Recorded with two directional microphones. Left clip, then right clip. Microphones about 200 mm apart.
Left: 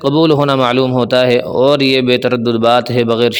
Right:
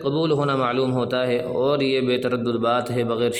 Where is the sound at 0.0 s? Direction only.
40° left (ahead or behind).